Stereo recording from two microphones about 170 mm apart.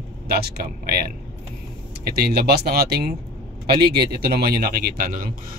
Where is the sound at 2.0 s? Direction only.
65° right (ahead or behind).